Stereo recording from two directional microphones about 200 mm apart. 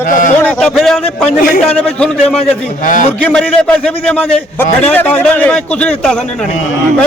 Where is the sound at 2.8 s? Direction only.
40° left (ahead or behind).